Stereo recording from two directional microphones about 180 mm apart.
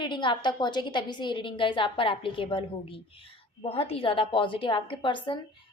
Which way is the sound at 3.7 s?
35° left (ahead or behind).